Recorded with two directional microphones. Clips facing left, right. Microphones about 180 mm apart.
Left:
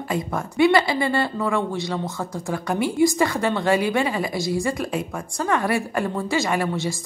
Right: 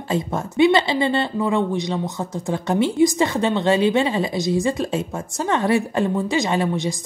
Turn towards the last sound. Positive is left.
turn(degrees=-20)  # may be behind; listen again after turning